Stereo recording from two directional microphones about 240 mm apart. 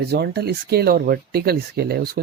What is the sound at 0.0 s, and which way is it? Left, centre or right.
Speech, right.